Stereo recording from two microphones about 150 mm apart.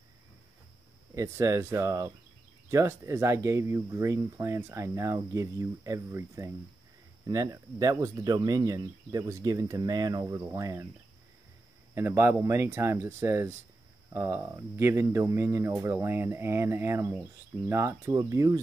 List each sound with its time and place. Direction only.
1.1 s speech: 20° right (ahead or behind)
11.9 s speech: 15° right (ahead or behind)